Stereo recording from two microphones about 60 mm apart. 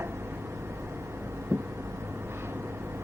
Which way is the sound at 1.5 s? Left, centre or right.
Right.